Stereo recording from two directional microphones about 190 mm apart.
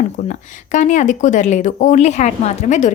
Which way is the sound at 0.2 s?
40° left (ahead or behind).